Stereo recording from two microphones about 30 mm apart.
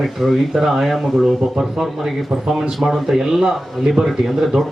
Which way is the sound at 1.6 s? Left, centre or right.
Centre.